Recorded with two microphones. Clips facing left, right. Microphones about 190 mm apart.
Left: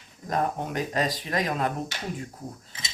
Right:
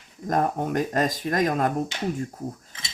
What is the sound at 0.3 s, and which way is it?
Speech, 45° right (ahead or behind).